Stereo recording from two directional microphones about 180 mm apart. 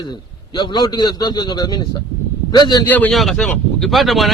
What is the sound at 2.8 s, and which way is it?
A man's voice, 10° left (ahead or behind).